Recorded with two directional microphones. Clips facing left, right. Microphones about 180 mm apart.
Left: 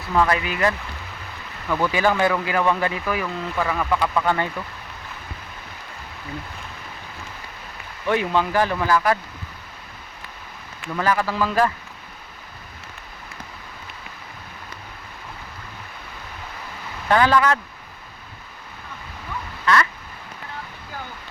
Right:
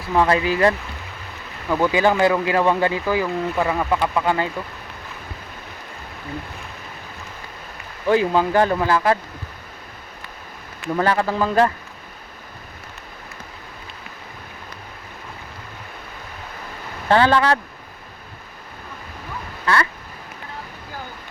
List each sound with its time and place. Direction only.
0.1 s speech: 25° right (ahead or behind)
1.6 s speech: 20° right (ahead or behind)
8.0 s speech: 35° right (ahead or behind)
10.8 s speech: 30° right (ahead or behind)
17.1 s speech: 30° right (ahead or behind)
19.6 s crow: 30° right (ahead or behind)